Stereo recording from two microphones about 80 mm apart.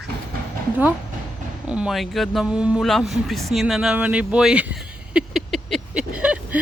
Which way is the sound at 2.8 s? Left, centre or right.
Centre.